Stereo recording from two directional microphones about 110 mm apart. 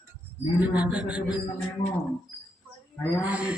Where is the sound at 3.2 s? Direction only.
10° right (ahead or behind).